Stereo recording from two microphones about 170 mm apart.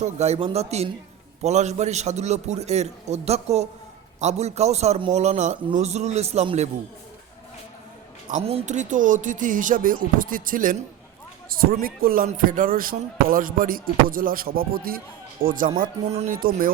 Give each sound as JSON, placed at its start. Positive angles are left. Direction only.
{"t": 0.0, "sound": "a man's voice", "side_deg": -40}
{"t": 8.4, "sound": "speech", "side_deg": -35}
{"t": 16.3, "sound": "speech", "side_deg": -55}